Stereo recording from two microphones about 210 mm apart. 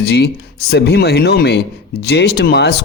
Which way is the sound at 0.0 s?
50° left (ahead or behind).